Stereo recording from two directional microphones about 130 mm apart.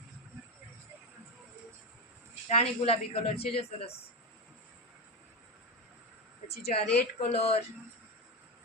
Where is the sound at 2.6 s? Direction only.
50° left (ahead or behind).